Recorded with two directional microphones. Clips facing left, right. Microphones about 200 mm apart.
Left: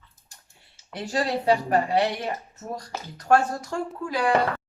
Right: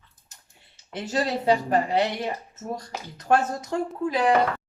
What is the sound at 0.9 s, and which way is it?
A woman's voice, 20° right (ahead or behind).